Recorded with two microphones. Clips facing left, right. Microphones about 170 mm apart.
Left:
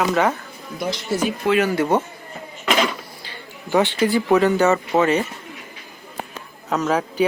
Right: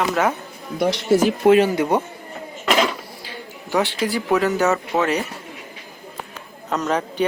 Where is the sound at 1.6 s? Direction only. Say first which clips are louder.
Even; 20° right (ahead or behind).